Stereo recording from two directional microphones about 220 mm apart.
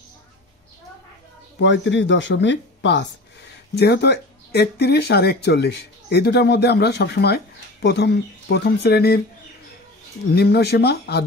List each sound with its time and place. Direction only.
1.6 s speech: 55° left (ahead or behind)
10.3 s speech: 45° left (ahead or behind)